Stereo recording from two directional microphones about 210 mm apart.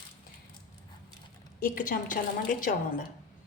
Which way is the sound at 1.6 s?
40° left (ahead or behind).